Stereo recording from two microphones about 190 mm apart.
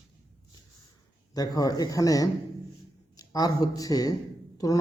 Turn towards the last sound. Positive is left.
turn(degrees=20)  # may be behind; listen again after turning